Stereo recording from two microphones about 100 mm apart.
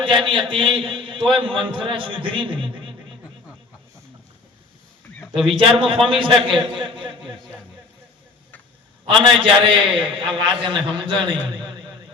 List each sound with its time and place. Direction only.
0.0 s a man's voice: 55° right (ahead or behind)
5.2 s a sound: centre (ahead or behind)
5.5 s a man's voice: 60° right (ahead or behind)
9.0 s a man's voice: 60° right (ahead or behind)